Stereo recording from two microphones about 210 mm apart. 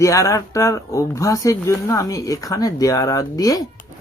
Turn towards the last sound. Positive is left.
turn(degrees=15)  # may be behind; listen again after turning